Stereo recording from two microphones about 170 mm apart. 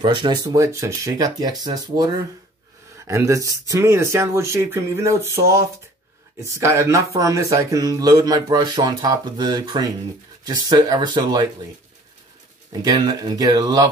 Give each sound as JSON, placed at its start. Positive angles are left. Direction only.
{"t": 0.0, "sound": "speech", "side_deg": -25}
{"t": 3.1, "sound": "speech", "side_deg": -20}
{"t": 12.8, "sound": "speech", "side_deg": -25}